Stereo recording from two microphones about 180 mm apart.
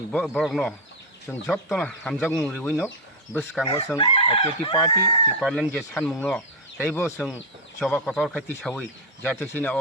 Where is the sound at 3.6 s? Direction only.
30° left (ahead or behind).